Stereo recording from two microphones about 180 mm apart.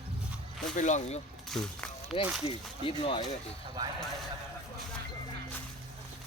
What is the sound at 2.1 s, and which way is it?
Speech, 35° left (ahead or behind).